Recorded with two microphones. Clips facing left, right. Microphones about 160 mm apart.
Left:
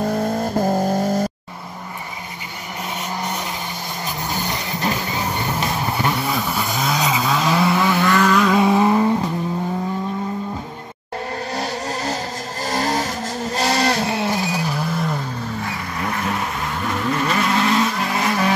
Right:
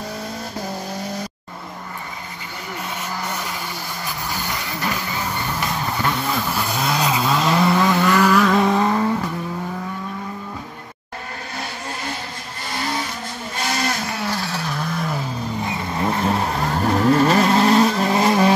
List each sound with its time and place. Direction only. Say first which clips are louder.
0.0 s vehicle: left 9 dB; 50° left (ahead or behind)
3.2 s vehicle: left 2 dB; 20° left (ahead or behind)
4.3 s music: left 3 dB; 25° left (ahead or behind)
6.2 s vehicle: left 1 dB; 5° left (ahead or behind)
8.0 s vehicle: left 1 dB; 10° right (ahead or behind); by 9.1 s 15° left (ahead or behind)
11.5 s vehicle: left 4 dB; 40° left (ahead or behind); by 15.1 s 5° left (ahead or behind)
15.6 s vehicle: right 3 dB; 25° right (ahead or behind)